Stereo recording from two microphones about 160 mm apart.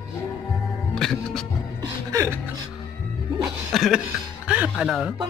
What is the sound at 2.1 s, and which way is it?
Speech, 20° right (ahead or behind).